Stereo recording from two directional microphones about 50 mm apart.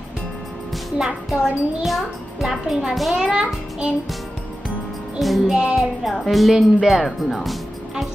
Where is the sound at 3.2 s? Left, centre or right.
Centre.